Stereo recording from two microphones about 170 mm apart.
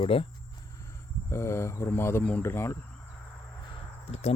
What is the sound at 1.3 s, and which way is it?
Speech, 15° left (ahead or behind).